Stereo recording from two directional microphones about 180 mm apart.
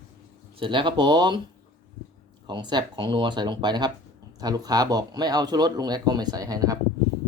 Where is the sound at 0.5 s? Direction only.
30° right (ahead or behind).